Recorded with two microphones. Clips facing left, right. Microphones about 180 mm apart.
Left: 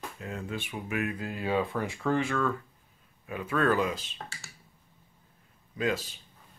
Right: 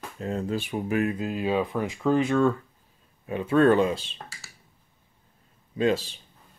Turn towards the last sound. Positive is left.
turn(degrees=-30)  # may be behind; listen again after turning